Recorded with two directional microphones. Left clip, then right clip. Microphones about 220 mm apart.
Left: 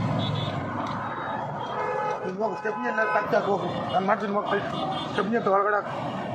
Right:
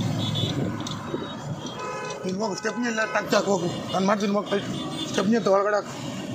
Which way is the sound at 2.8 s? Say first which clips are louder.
Left 2 dB; 60° right (ahead or behind).